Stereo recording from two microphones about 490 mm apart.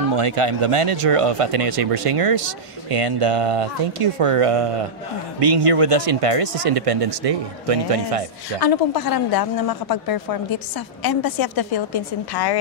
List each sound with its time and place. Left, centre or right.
0.1 s speech: right
8.5 s speech: left